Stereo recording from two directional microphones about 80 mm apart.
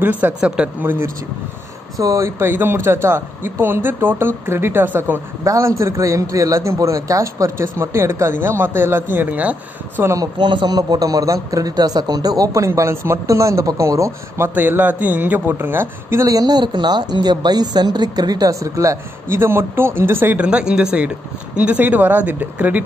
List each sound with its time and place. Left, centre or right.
0.0 s speech: right
0.8 s speech: right
2.0 s speech: right
5.4 s a man's voice: right; by 10.0 s centre
10.0 s speech: right
10.4 s speech: right
10.8 s speech: right
14.5 s speech: right
16.3 s a woman's voice: right
20.3 s speech: centre